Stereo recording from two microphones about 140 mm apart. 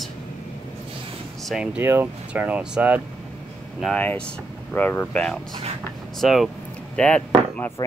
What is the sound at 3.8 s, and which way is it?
Speech, 10° left (ahead or behind).